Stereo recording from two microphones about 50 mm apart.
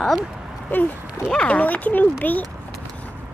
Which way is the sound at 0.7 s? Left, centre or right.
Left.